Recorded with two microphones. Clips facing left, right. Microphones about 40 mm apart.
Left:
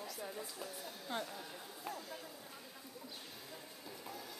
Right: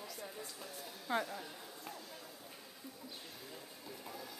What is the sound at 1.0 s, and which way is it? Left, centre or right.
Speech, centre.